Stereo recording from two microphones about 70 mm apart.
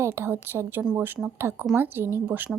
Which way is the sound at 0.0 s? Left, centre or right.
Right.